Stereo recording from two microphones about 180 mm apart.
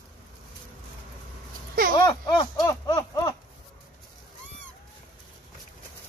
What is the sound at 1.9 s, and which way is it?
Speech, 25° left (ahead or behind).